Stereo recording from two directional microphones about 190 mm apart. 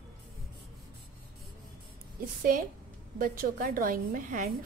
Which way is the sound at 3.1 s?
50° right (ahead or behind).